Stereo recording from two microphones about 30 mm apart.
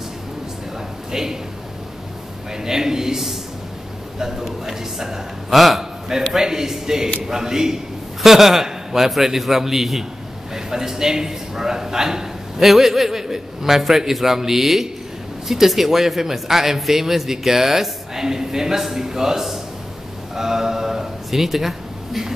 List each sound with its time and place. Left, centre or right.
1.1 s a man's voice: centre
2.5 s a man's voice: centre
4.5 s a man's voice: centre
5.5 s a man's voice: centre
5.8 s a man's voice: centre
20.3 s a sound: centre